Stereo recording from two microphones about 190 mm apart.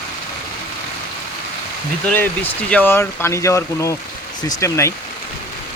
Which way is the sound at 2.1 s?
10° left (ahead or behind).